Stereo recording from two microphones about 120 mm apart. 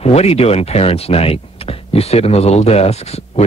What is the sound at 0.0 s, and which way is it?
Speech, 60° left (ahead or behind).